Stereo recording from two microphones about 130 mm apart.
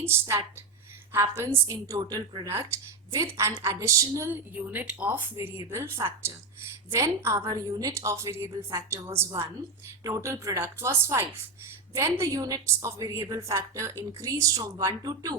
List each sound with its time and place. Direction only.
0.0 s a woman's voice: 20° right (ahead or behind)
4.3 s a woman's voice: 15° right (ahead or behind); by 15.4 s 30° right (ahead or behind)